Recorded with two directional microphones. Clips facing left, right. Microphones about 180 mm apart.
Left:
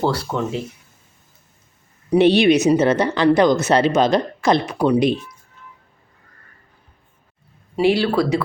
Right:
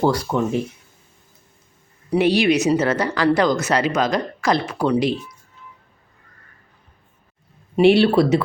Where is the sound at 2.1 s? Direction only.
25° left (ahead or behind).